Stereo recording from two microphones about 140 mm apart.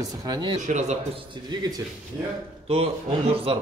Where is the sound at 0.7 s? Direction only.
60° right (ahead or behind).